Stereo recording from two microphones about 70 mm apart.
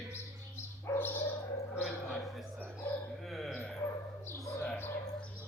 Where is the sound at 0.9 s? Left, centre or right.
Left.